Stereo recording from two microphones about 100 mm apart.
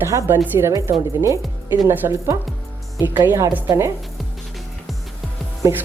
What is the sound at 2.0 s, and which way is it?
Speech, 35° right (ahead or behind).